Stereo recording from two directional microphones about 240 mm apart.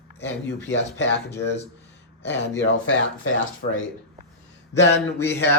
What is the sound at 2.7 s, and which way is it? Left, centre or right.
Speech, left.